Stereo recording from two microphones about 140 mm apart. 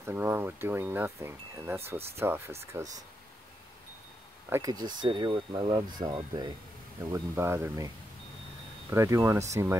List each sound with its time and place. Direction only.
0.0 s speech: 15° right (ahead or behind)
4.5 s speech: 25° right (ahead or behind)
7.1 s speech: 20° right (ahead or behind)
8.9 s speech: 20° right (ahead or behind)